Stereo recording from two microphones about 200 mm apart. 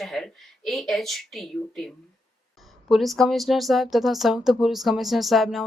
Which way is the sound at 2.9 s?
Centre (ahead or behind).